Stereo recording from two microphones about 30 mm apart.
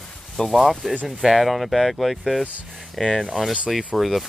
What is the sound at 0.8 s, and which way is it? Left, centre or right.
Speech, centre.